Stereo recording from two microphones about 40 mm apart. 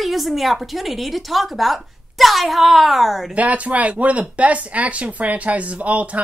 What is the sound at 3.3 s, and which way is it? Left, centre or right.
Speech, right.